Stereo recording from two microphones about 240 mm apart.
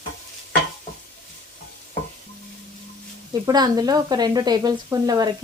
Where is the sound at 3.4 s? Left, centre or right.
Centre.